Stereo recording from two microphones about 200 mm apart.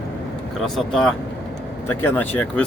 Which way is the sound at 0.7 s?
Centre (ahead or behind).